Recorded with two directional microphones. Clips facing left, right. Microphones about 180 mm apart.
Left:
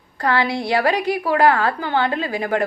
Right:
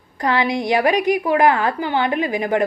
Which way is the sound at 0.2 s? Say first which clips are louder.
Right 1 dB; 20° right (ahead or behind).